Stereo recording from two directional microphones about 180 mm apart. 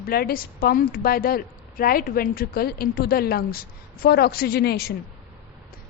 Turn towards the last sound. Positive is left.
turn(degrees=60)  # may be behind; listen again after turning